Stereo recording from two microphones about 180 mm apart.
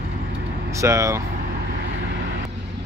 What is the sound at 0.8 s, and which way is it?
Speech, 15° right (ahead or behind).